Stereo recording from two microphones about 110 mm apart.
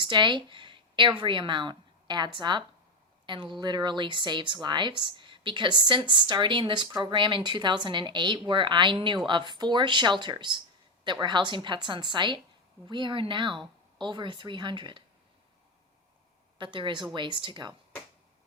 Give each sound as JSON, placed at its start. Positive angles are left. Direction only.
{"t": 0.0, "sound": "a sound", "side_deg": -45}
{"t": 1.2, "sound": "a woman's voice", "side_deg": -45}
{"t": 16.6, "sound": "a woman's voice", "side_deg": -50}